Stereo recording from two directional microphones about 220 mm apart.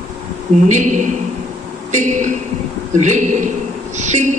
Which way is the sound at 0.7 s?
35° right (ahead or behind).